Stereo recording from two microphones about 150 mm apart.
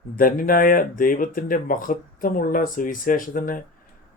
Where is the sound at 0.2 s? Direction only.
70° left (ahead or behind).